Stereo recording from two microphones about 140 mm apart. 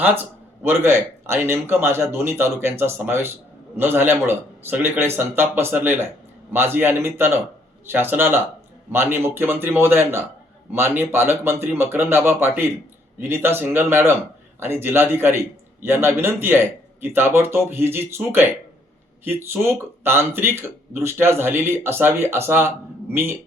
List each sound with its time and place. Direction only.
0.6 s a man's voice: 15° right (ahead or behind)